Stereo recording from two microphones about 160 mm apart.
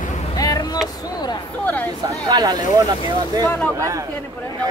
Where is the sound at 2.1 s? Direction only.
25° right (ahead or behind).